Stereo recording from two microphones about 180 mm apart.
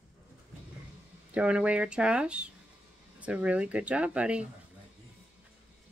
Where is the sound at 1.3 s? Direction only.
5° right (ahead or behind).